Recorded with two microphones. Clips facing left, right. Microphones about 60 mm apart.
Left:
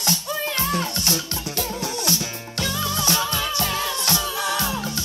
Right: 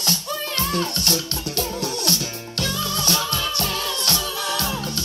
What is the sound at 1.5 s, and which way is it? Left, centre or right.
Music, right.